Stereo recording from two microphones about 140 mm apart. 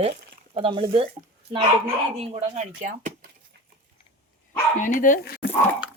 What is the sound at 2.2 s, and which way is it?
Speech, 50° right (ahead or behind).